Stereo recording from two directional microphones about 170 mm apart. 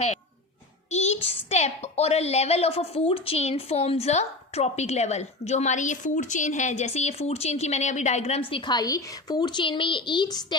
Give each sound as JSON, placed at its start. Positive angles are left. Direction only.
{"t": 0.9, "sound": "a child's voice", "side_deg": 40}